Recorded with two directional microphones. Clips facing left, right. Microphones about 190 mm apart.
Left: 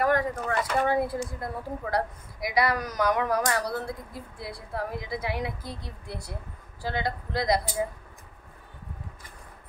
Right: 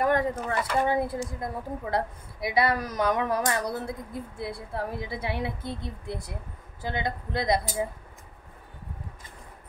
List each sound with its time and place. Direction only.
0.0 s a woman's voice: 25° right (ahead or behind)